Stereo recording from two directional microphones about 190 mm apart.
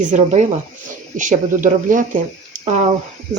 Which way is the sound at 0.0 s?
40° right (ahead or behind).